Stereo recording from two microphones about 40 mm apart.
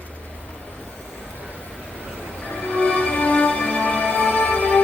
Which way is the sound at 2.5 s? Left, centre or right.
Left.